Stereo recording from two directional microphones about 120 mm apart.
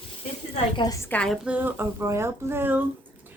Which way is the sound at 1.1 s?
10° left (ahead or behind).